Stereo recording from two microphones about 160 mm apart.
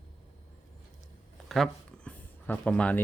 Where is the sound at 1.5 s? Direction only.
5° left (ahead or behind).